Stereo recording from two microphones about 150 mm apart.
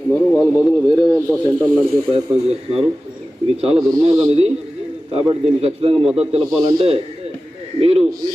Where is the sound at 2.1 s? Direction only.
40° right (ahead or behind).